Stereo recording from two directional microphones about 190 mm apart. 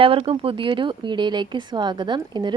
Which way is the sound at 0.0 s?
30° right (ahead or behind).